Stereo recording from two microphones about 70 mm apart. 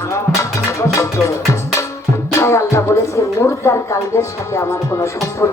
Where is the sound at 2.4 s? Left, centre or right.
Left.